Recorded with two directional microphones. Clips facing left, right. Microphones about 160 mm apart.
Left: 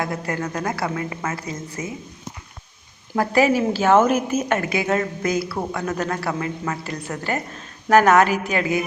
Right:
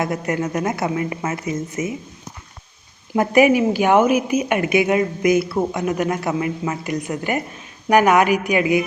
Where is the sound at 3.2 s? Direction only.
15° right (ahead or behind).